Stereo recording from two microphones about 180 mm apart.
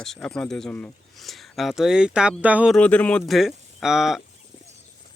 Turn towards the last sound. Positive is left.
turn(degrees=0)  # may be behind; listen again after turning